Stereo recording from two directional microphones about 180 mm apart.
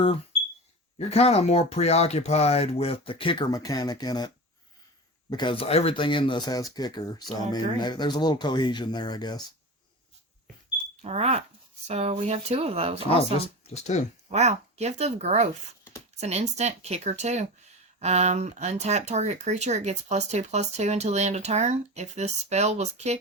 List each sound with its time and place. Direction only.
0.9 s speech: 35° left (ahead or behind)
5.3 s speech: 25° left (ahead or behind)
11.0 s speech: 35° right (ahead or behind)
13.7 s speech: 40° left (ahead or behind)
14.3 s speech: 40° right (ahead or behind)